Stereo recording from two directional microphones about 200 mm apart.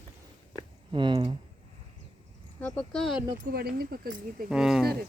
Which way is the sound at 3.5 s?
50° right (ahead or behind).